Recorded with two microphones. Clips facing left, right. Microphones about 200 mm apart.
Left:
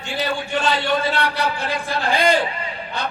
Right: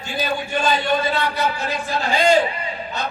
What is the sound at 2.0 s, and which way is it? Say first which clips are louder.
Speech: right 1 dB; 55° left (ahead or behind).